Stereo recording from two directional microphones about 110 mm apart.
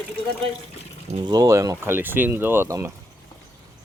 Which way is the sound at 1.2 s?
35° right (ahead or behind).